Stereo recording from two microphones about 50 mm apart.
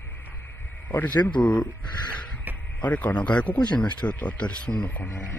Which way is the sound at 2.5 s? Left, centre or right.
Right.